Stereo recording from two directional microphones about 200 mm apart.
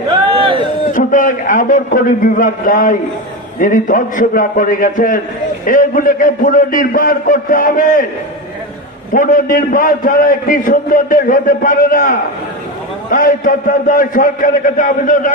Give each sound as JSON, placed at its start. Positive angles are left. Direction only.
{"t": 0.3, "sound": "a sound", "side_deg": -25}
{"t": 0.9, "sound": "a man's voice", "side_deg": 40}
{"t": 9.1, "sound": "a man's voice", "side_deg": 40}